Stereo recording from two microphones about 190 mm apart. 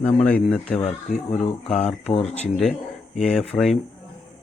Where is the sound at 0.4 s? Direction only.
5° left (ahead or behind).